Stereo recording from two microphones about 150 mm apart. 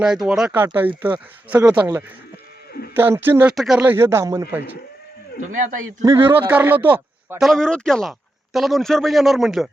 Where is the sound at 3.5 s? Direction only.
Centre (ahead or behind); by 4.4 s 20° right (ahead or behind).